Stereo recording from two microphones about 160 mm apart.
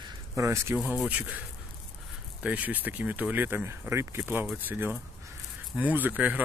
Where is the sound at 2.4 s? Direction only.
10° right (ahead or behind).